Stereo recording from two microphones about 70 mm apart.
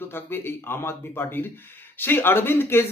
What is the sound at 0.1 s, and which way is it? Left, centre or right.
A man's voice, left.